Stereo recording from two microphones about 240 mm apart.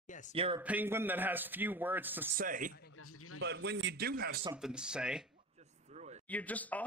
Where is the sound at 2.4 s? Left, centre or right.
Right.